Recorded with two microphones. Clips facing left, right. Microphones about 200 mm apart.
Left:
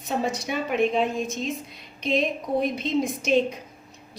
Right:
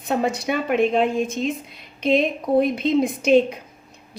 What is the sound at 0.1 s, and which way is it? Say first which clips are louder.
A woman's voice: right 5 dB; 60° right (ahead or behind).